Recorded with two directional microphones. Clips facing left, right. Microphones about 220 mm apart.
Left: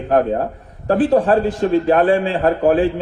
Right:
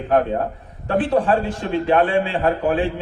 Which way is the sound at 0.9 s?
40° left (ahead or behind).